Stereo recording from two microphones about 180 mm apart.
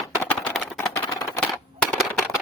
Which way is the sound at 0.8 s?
20° left (ahead or behind).